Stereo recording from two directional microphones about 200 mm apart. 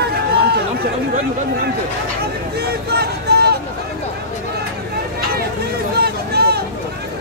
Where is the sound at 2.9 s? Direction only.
55° right (ahead or behind).